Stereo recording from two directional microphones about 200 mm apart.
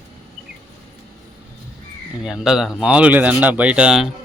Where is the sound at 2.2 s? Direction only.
Centre (ahead or behind).